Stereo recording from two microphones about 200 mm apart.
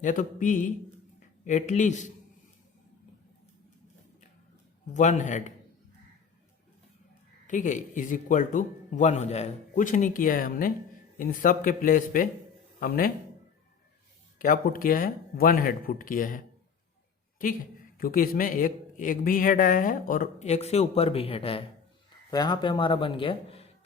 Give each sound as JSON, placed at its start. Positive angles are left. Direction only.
{"t": 0.0, "sound": "speech", "side_deg": 40}
{"t": 4.9, "sound": "speech", "side_deg": 35}
{"t": 7.4, "sound": "a man's voice", "side_deg": 40}
{"t": 14.3, "sound": "a man's voice", "side_deg": 45}
{"t": 17.4, "sound": "a man's voice", "side_deg": 45}